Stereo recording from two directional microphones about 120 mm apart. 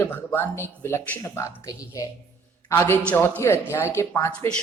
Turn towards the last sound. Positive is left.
turn(degrees=20)  # may be behind; listen again after turning